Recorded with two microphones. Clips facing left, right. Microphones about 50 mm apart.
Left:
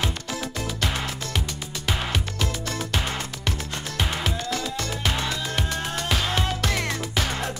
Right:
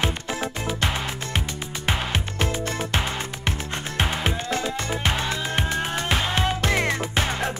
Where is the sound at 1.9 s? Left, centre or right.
Right.